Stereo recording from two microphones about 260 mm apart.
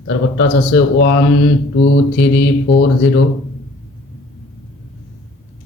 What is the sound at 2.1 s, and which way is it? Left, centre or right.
Mantra, left.